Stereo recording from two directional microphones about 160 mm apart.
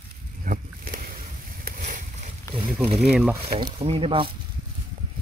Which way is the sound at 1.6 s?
60° right (ahead or behind).